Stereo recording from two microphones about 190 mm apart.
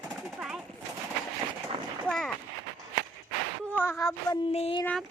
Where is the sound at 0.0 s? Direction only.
Centre (ahead or behind).